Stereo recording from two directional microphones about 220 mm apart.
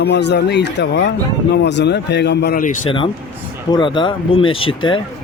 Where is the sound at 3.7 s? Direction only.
20° left (ahead or behind).